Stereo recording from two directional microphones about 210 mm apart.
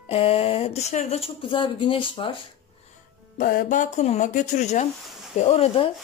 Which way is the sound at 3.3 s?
40° left (ahead or behind).